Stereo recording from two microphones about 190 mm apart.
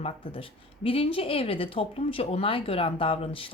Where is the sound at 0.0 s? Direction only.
30° left (ahead or behind).